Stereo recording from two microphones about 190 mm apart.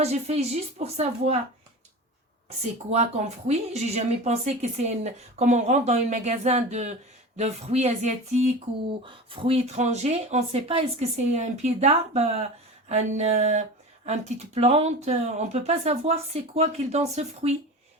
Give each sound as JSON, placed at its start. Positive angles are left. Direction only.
{"t": 0.0, "sound": "speech", "side_deg": -35}
{"t": 2.9, "sound": "speech", "side_deg": -35}